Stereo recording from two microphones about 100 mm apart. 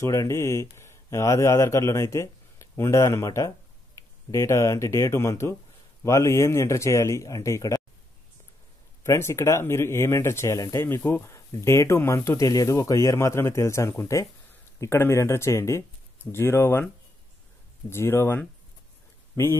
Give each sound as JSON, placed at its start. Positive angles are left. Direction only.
{"t": 0.0, "sound": "a man's voice", "side_deg": 30}
{"t": 9.0, "sound": "speech", "side_deg": 30}
{"t": 17.8, "sound": "speech", "side_deg": 25}